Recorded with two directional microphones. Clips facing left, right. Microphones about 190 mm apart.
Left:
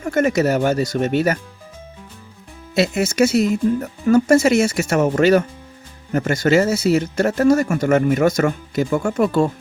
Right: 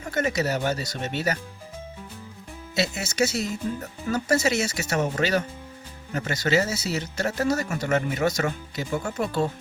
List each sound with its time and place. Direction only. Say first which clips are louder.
0.0 s speech: left 8 dB; 50° left (ahead or behind)
2.7 s speech: left 8 dB; 55° left (ahead or behind)